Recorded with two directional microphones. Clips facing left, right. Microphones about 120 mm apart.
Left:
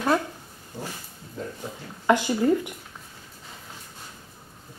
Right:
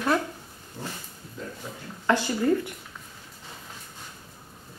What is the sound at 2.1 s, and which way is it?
Speech, 15° left (ahead or behind).